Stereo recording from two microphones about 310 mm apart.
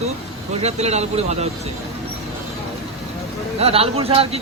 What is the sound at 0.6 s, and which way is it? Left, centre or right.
Speech, right.